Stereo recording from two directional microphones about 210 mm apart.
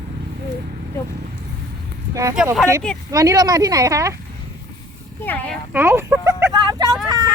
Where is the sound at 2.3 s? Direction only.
5° right (ahead or behind).